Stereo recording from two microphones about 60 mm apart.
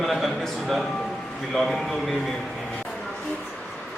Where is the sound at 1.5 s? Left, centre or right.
Centre.